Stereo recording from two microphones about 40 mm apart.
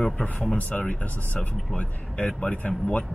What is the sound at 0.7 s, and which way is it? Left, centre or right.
Speech, left.